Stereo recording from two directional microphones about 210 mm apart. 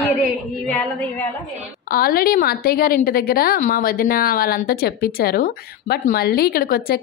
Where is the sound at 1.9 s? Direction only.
45° left (ahead or behind).